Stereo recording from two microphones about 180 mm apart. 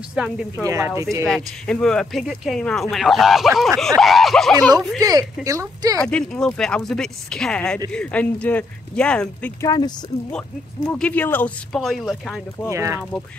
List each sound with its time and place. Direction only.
0.1 s speech: 5° right (ahead or behind)
0.7 s speech: 15° right (ahead or behind)
1.2 s speech: 5° left (ahead or behind)
5.0 s speech: 20° right (ahead or behind)
5.9 s speech: 5° left (ahead or behind)
9.6 s speech: 20° left (ahead or behind)
10.9 s speech: 10° left (ahead or behind)
12.6 s speech: 15° right (ahead or behind)